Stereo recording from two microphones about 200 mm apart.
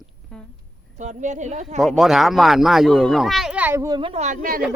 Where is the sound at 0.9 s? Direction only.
35° right (ahead or behind).